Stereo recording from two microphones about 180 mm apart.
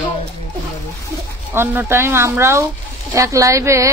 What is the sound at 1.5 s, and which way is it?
Speech, 15° right (ahead or behind).